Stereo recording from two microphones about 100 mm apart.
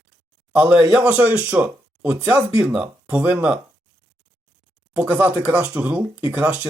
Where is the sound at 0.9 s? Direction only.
15° right (ahead or behind).